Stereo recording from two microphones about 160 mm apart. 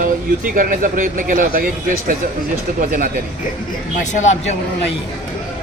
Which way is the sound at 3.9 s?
50° left (ahead or behind).